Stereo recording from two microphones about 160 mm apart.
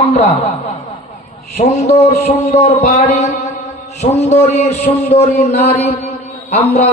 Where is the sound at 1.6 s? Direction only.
40° left (ahead or behind).